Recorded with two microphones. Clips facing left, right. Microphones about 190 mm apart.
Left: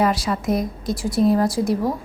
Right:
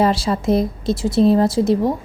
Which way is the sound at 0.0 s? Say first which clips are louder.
Right 3 dB; 30° right (ahead or behind).